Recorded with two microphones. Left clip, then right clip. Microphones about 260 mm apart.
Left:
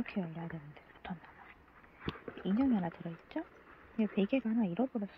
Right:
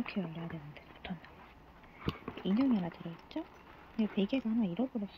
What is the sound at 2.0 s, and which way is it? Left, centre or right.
Speech, centre.